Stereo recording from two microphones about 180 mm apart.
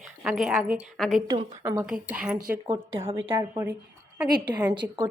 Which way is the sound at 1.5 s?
15° right (ahead or behind).